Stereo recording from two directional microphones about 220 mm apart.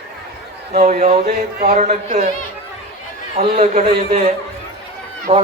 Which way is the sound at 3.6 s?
30° right (ahead or behind).